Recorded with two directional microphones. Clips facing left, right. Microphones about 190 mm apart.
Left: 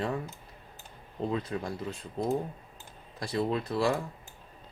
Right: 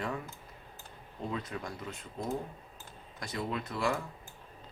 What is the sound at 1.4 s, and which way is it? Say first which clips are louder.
Speech: left 6 dB; 35° left (ahead or behind).